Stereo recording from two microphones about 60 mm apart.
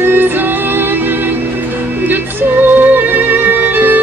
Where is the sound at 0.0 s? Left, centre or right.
Right.